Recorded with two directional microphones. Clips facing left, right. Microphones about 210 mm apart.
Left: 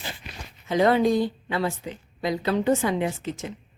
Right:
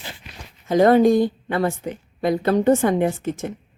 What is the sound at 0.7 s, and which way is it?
A woman's voice, 45° right (ahead or behind).